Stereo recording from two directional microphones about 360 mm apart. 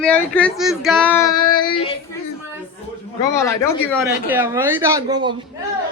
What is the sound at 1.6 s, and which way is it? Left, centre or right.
Speech, centre.